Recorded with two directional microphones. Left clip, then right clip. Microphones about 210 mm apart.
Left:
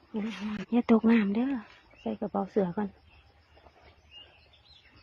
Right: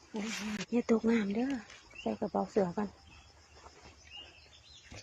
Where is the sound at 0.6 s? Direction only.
20° left (ahead or behind).